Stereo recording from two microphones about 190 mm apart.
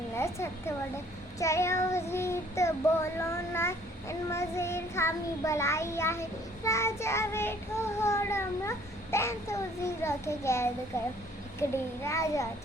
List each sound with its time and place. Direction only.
1.4 s child singing: 15° left (ahead or behind)